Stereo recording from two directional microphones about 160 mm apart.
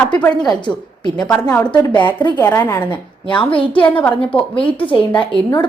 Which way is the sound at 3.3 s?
35° left (ahead or behind).